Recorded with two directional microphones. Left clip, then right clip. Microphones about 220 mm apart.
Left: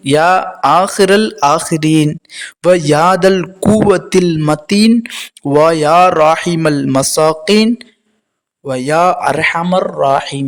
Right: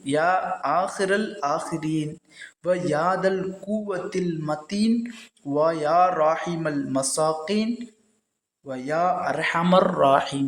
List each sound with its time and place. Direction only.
0.0 s a man's voice: 50° left (ahead or behind)